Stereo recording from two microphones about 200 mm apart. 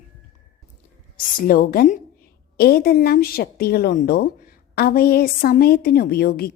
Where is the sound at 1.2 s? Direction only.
45° left (ahead or behind).